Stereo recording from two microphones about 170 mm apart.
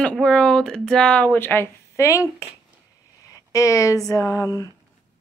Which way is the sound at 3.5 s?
20° left (ahead or behind).